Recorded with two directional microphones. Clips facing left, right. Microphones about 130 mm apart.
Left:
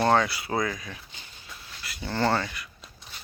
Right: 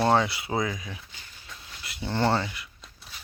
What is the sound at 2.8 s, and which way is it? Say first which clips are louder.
Dog: left 1 dB; centre (ahead or behind).